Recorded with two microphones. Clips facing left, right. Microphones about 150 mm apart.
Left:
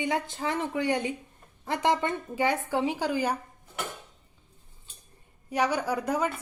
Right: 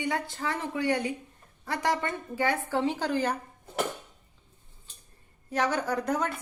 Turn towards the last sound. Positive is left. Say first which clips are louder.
# left 1 dB
turn(degrees=10)  # may be behind; listen again after turning